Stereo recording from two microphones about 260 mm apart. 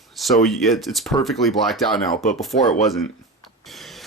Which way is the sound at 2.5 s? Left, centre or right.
Left.